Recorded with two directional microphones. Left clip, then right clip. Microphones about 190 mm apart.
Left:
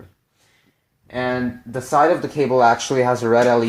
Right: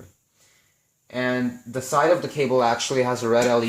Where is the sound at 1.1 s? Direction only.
35° left (ahead or behind).